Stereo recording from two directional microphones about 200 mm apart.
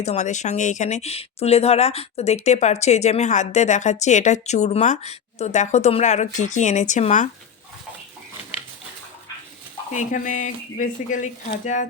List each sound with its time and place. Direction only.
0.0 s speech: 35° left (ahead or behind)
9.9 s speech: 40° left (ahead or behind)